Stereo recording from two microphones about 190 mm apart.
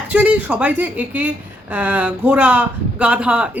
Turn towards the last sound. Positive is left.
turn(degrees=-5)  # may be behind; listen again after turning